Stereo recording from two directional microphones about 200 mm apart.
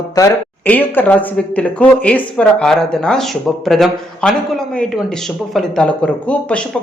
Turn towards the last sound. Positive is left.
turn(degrees=5)  # may be behind; listen again after turning